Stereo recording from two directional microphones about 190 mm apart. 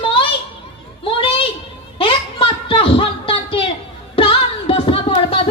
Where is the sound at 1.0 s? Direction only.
30° left (ahead or behind).